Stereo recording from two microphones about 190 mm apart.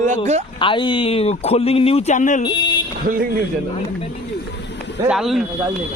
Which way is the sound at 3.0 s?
45° right (ahead or behind).